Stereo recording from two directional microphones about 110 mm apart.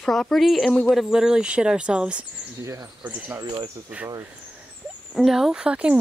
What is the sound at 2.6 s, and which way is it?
Speech, 30° right (ahead or behind).